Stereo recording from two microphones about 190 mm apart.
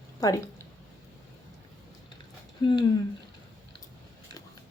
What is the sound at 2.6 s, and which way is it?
Speech, 20° left (ahead or behind).